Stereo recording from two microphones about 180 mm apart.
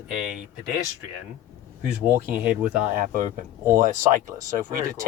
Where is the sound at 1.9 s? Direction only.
10° right (ahead or behind).